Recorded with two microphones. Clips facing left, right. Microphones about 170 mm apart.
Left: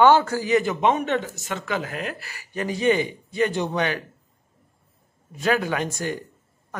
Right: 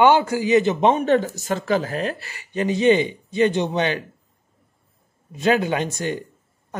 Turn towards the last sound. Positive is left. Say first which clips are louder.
# right 3 dB
turn(degrees=-20)  # may be behind; listen again after turning